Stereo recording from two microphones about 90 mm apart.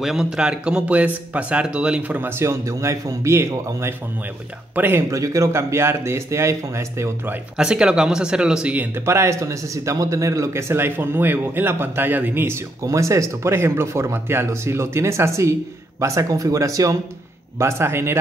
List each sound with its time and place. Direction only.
0.0 s speech: 5° right (ahead or behind); by 5.0 s 25° right (ahead or behind)
5.1 s speech: 35° right (ahead or behind)
7.5 s speech: 10° right (ahead or behind)
8.9 s speech: 30° right (ahead or behind)
12.8 s speech: 35° right (ahead or behind)